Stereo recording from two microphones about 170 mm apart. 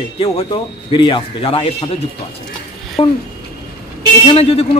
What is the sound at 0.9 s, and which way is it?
A man's voice, 30° left (ahead or behind).